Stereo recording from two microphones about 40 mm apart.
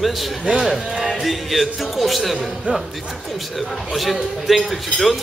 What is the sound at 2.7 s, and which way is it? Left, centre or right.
Speech, right.